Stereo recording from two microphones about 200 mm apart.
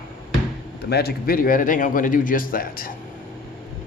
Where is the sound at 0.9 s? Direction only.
50° left (ahead or behind).